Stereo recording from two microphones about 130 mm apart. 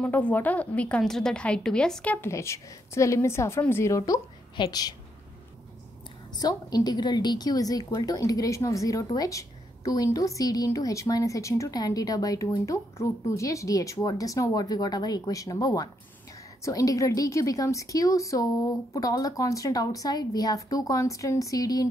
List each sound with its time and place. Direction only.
0.0 s a woman's voice: 10° left (ahead or behind)
2.2 s a woman's voice: 20° left (ahead or behind)
6.4 s a woman's voice: 30° left (ahead or behind)